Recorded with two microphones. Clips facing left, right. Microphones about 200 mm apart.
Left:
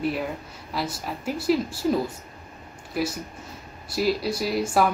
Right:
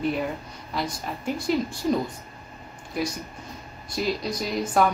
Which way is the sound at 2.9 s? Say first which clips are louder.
Left 1 dB; 5° left (ahead or behind).